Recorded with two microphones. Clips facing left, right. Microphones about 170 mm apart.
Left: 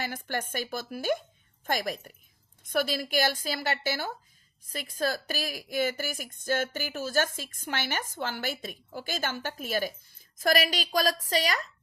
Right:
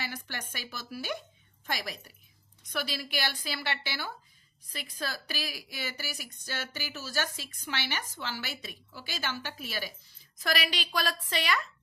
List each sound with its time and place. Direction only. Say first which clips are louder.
0.0 s speech: left 6 dB; 50° left (ahead or behind)